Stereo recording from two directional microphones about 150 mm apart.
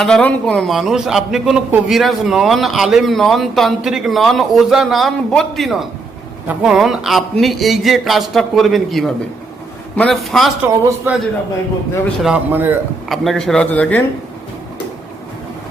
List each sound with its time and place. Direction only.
0.0 s a man's voice: 5° left (ahead or behind)
10.8 s a man's voice: 10° right (ahead or behind)
12.2 s a man's voice: 10° right (ahead or behind)
13.1 s a man's voice: centre (ahead or behind)